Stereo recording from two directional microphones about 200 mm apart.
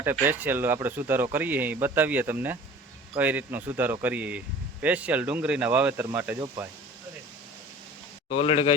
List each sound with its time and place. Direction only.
0.0 s speech: 10° right (ahead or behind)
8.3 s speech: 30° left (ahead or behind)